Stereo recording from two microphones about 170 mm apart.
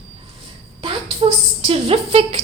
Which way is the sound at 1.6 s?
35° right (ahead or behind).